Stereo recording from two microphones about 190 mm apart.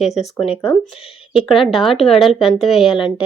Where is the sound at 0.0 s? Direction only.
35° left (ahead or behind).